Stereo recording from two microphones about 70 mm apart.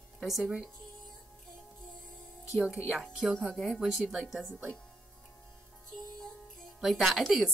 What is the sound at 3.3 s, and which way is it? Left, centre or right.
A woman's voice, centre.